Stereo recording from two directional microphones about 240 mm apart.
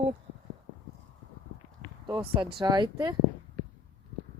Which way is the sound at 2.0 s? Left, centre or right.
Centre.